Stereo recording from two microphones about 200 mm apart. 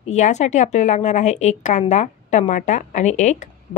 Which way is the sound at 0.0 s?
35° left (ahead or behind).